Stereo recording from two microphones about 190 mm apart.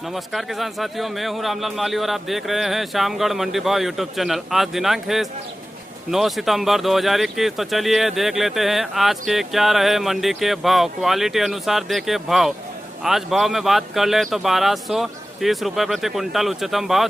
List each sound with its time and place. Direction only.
0.1 s speech: centre (ahead or behind)